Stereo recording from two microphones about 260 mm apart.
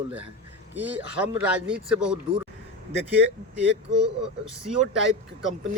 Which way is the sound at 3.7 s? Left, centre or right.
Right.